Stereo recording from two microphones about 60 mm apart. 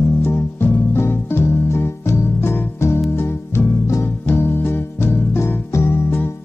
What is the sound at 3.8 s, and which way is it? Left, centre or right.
Music, left.